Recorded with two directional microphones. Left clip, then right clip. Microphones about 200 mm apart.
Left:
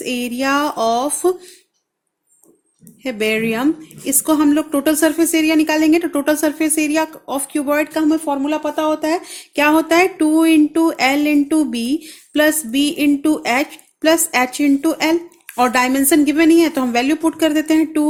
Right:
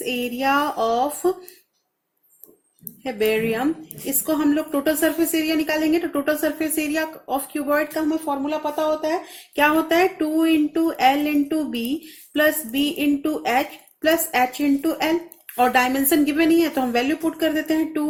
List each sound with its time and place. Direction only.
0.0 s speech: 35° left (ahead or behind)
3.0 s speech: 40° left (ahead or behind)
8.2 s speech: 45° left (ahead or behind)